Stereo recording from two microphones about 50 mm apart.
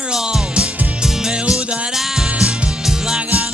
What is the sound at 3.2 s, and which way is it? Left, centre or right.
Music, right.